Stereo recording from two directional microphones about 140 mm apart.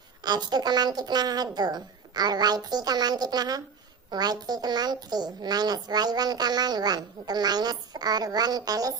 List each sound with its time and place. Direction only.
0.2 s a woman's voice: 30° right (ahead or behind)